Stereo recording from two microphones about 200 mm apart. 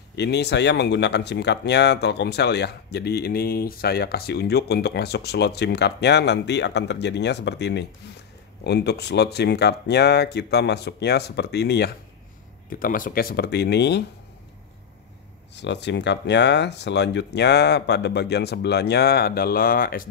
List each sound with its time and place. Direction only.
0.1 s speech: 60° left (ahead or behind)
15.5 s speech: 60° left (ahead or behind)